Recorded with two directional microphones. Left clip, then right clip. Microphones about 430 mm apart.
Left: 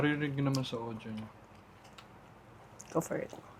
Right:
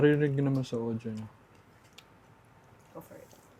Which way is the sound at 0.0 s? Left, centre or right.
Right.